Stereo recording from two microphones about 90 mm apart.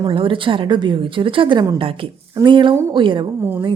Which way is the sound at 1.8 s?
80° right.